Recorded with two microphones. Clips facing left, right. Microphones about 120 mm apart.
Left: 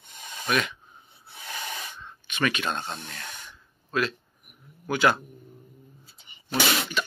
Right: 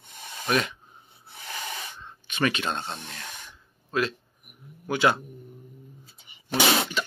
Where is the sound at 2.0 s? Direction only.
30° right (ahead or behind).